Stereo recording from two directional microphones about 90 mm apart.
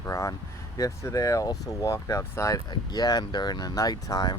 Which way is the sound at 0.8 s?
35° left (ahead or behind).